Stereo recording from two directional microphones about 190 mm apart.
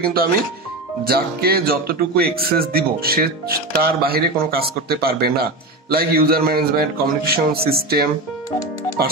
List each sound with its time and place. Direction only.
0.0 s speech: 50° right (ahead or behind)